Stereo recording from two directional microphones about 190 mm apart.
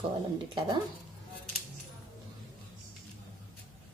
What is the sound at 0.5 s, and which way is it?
Speech, 25° right (ahead or behind).